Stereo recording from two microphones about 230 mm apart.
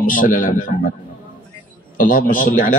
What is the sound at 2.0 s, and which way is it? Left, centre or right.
Speech, left.